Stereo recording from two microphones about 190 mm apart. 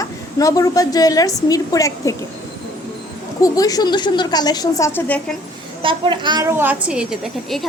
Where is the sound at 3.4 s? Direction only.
20° left (ahead or behind).